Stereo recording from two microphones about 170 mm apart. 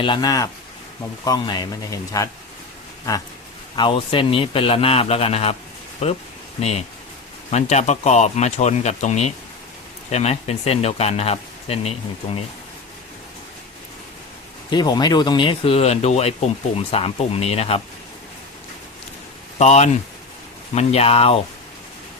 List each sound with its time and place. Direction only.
0.0 s speech: 25° left (ahead or behind)
3.8 s speech: 30° left (ahead or behind)
6.6 s speech: 40° left (ahead or behind)
14.7 s speech: 25° left (ahead or behind)
19.5 s speech: 40° left (ahead or behind)